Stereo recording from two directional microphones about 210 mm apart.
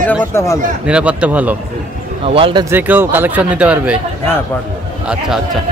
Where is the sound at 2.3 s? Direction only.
25° right (ahead or behind).